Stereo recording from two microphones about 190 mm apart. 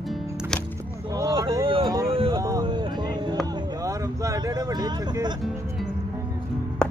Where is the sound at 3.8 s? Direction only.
15° right (ahead or behind).